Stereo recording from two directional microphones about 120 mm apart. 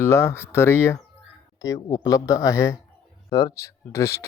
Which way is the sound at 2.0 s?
25° left (ahead or behind).